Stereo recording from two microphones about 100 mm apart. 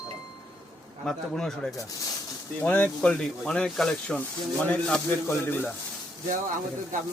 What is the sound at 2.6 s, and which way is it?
Speech, 15° left (ahead or behind).